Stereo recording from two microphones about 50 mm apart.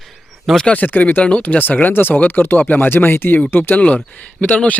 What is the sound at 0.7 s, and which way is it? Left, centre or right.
Speech, left.